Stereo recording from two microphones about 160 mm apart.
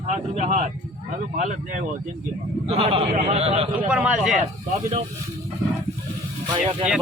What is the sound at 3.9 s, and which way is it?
Speech, 10° right (ahead or behind).